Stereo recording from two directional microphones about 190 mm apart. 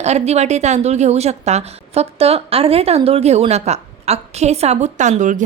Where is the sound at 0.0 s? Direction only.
35° right (ahead or behind).